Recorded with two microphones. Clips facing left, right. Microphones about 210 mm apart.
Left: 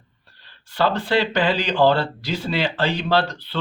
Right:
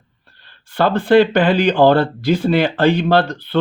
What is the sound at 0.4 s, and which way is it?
Speech, 50° right (ahead or behind).